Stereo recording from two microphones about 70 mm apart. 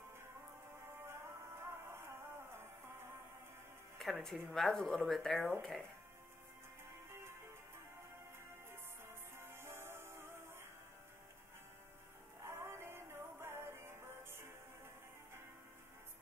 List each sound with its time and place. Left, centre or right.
0.8 s music: right
4.0 s speech: centre
7.1 s music: right
9.0 s music: right
12.4 s music: right